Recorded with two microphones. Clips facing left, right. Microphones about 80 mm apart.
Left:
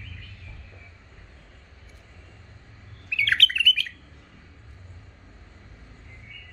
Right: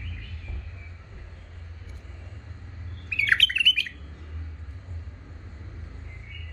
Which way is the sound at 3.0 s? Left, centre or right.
Right.